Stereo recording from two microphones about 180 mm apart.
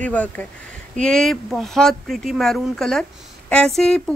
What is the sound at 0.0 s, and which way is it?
Speech, 10° left (ahead or behind).